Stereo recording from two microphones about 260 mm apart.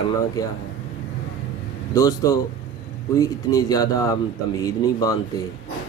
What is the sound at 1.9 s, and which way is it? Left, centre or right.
Speech, centre.